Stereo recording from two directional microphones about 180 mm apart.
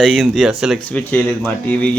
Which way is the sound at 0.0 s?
Centre (ahead or behind).